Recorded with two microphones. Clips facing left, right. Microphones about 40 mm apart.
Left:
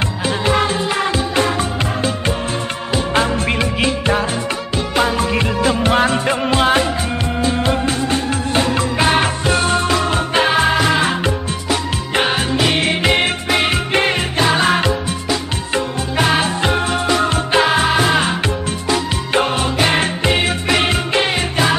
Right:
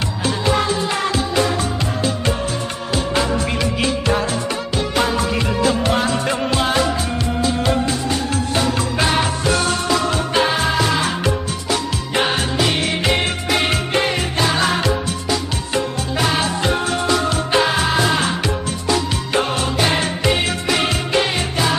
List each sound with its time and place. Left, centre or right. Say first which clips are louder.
3.2 s music: left 3 dB; left
3.5 s music: left 2 dB; left
5.1 s music: left 2 dB; left
12.5 s music: left 3 dB; left
16.2 s music: left 3 dB; left
19.3 s music: left 3 dB; left